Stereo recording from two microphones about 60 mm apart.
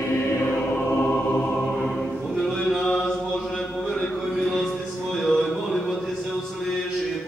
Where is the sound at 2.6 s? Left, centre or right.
Centre.